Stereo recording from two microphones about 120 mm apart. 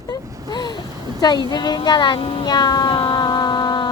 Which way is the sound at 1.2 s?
35° left (ahead or behind).